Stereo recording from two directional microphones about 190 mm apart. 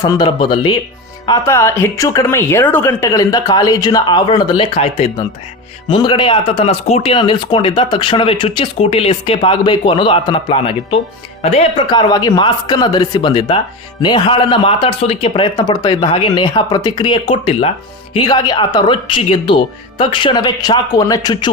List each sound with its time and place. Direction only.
0.0 s speech: 20° left (ahead or behind)